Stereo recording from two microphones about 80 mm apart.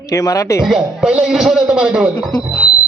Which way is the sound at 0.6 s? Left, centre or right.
Centre.